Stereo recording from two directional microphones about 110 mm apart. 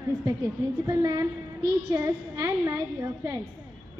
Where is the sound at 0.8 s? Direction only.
35° right (ahead or behind).